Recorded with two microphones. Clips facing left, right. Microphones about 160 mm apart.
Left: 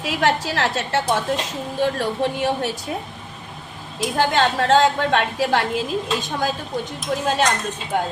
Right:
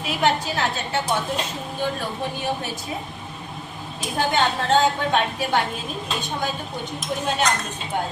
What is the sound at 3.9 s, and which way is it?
A woman's voice, 90° left.